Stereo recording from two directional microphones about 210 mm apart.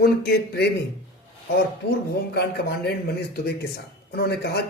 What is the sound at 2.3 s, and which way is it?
Speech, 50° left (ahead or behind).